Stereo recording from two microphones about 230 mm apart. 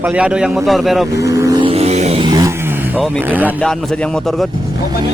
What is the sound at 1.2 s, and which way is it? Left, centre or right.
Vehicle, centre.